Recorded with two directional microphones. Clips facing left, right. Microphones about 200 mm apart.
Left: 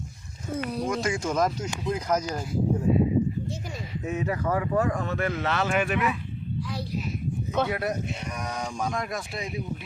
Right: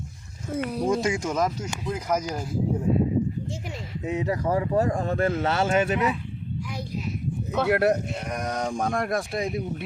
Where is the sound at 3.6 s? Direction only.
20° right (ahead or behind).